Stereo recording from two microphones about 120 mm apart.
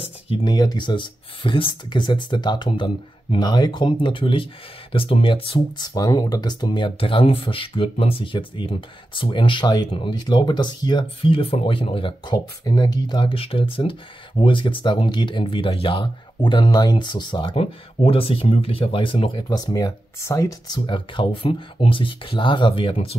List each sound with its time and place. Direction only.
0.0 s a sound: 50° left (ahead or behind)
0.5 s speech: 35° left (ahead or behind)
5.8 s speech: 35° left (ahead or behind); by 12.2 s 50° left (ahead or behind)
12.3 s speech: 35° left (ahead or behind)
13.3 s speech: 50° left (ahead or behind)
17.6 s speech: 50° left (ahead or behind)
19.5 s speech: 30° left (ahead or behind); by 23.1 s 50° left (ahead or behind)